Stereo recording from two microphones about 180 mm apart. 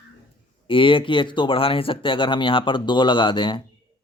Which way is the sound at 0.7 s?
30° left (ahead or behind).